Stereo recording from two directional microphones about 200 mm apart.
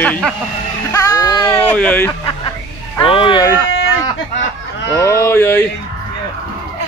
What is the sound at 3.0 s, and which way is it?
Speech, 25° left (ahead or behind).